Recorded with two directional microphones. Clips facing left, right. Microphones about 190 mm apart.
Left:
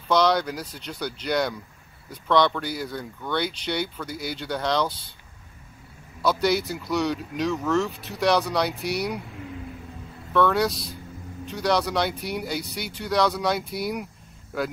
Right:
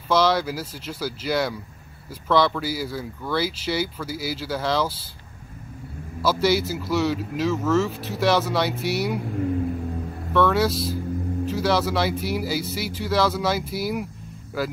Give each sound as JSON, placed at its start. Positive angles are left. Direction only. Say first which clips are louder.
{"t": 0.1, "sound": "speech", "louder": "right 1 dB", "side_deg": -5}
{"t": 6.2, "sound": "speech", "louder": "right 2 dB", "side_deg": 0}
{"t": 10.3, "sound": "speech", "louder": "right 1 dB", "side_deg": 0}